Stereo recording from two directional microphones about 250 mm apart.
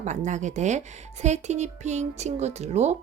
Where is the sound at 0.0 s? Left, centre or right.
Right.